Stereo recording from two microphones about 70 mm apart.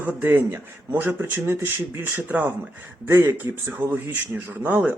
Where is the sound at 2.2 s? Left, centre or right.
Right.